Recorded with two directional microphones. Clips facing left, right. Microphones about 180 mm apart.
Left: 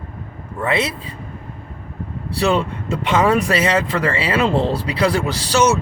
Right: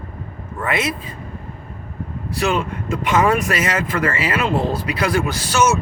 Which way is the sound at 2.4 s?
30° left (ahead or behind).